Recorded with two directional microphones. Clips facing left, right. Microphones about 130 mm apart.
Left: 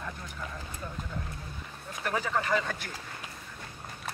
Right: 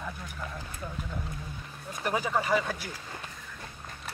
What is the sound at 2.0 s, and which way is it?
Speech, 15° right (ahead or behind).